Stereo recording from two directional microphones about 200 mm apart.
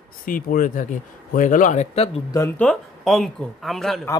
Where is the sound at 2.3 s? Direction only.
10° left (ahead or behind).